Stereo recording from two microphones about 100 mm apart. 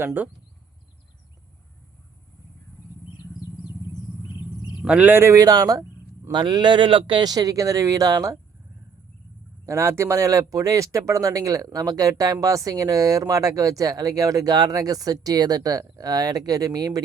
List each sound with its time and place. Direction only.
0.0 s speech: 15° right (ahead or behind)
4.9 s speech: 15° right (ahead or behind); by 8.4 s 35° right (ahead or behind)
9.6 s speech: 25° right (ahead or behind)